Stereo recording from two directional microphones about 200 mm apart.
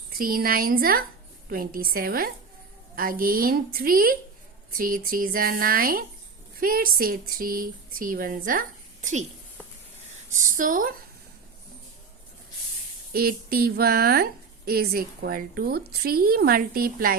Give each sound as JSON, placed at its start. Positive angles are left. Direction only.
{"t": 0.1, "sound": "a woman's voice", "side_deg": -45}
{"t": 10.3, "sound": "a woman's voice", "side_deg": -40}
{"t": 13.1, "sound": "a woman's voice", "side_deg": -50}